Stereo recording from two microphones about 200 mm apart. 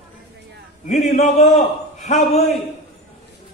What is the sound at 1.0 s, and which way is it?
A man's voice, 35° left (ahead or behind).